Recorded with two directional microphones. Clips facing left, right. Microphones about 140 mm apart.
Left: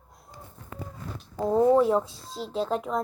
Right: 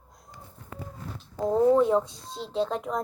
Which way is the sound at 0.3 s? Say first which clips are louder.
Left 2 dB; 35° left (ahead or behind).